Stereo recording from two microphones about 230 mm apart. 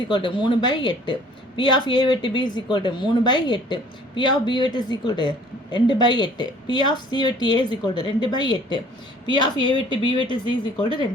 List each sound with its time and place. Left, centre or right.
0.0 s a woman's voice: left